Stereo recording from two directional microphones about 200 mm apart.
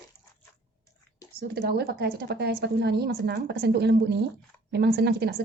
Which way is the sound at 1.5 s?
50° right (ahead or behind).